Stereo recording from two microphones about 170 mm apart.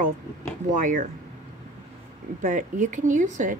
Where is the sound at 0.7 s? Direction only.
50° right (ahead or behind).